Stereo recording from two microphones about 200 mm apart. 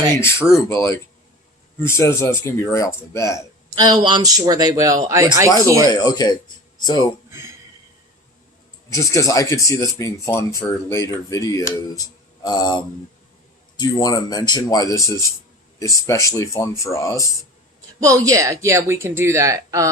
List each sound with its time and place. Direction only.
0.2 s speech: 15° left (ahead or behind)
3.8 s a woman's voice: 20° right (ahead or behind)
5.9 s speech: 20° left (ahead or behind)
8.9 s speech: 15° left (ahead or behind)
18.0 s a woman's voice: 15° right (ahead or behind)